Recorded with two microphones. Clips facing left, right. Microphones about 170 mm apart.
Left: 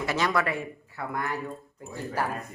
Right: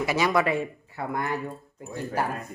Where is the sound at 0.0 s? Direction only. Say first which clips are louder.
Right 3 dB; 10° right (ahead or behind).